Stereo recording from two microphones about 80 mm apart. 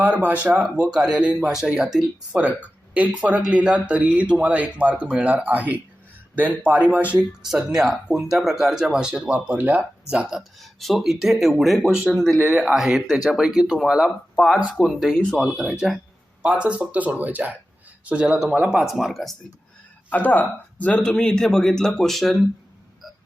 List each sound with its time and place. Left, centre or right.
0.0 s speech: right
2.9 s speech: centre
7.5 s speech: centre; by 9.8 s right
10.1 s speech: centre
14.3 s speech: centre
16.4 s speech: centre
18.8 s speech: centre
20.1 s speech: centre